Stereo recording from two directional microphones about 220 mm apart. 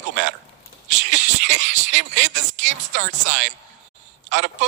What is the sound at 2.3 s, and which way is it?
Speech, 55° right (ahead or behind).